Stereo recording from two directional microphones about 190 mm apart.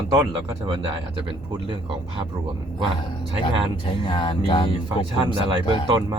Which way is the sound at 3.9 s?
25° left (ahead or behind).